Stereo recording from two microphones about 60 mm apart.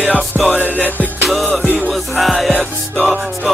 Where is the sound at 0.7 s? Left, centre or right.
Left.